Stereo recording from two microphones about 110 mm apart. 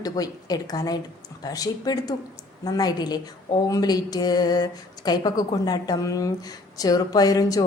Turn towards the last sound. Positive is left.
turn(degrees=35)  # may be behind; listen again after turning